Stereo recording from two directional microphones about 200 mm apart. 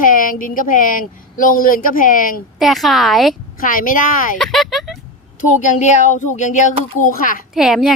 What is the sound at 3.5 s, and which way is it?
Speech, 45° left (ahead or behind).